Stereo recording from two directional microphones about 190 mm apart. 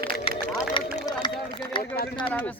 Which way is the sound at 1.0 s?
20° left (ahead or behind).